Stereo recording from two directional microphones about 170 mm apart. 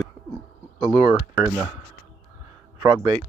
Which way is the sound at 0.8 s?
Centre (ahead or behind).